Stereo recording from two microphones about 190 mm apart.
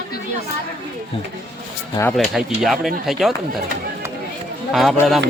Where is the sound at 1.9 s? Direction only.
10° left (ahead or behind).